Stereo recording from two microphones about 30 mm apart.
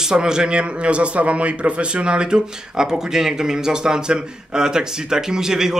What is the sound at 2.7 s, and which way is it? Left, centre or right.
A man's voice, centre.